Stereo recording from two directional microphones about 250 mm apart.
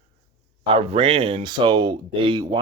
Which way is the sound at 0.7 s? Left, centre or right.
Right.